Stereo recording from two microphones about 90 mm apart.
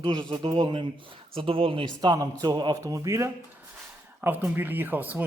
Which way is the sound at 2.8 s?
35° right (ahead or behind).